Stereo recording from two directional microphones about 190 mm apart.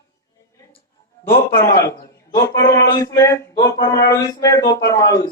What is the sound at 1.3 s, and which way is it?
Speech, 55° left (ahead or behind).